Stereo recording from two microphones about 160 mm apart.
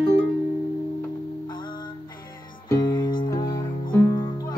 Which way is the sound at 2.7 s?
25° left (ahead or behind).